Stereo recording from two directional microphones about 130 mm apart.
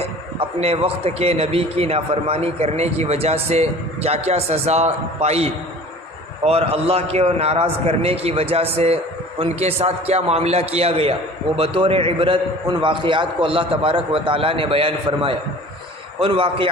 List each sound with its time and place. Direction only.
0.3 s a man's voice: 50° right (ahead or behind)